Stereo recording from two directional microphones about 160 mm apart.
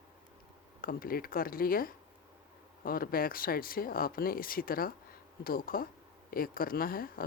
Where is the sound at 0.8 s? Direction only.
65° left (ahead or behind).